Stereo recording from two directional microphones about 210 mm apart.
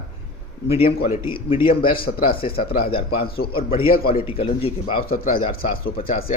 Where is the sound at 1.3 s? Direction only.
25° left (ahead or behind).